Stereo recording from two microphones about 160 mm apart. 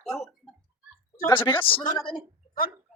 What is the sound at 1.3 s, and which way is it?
Speech, 30° left (ahead or behind).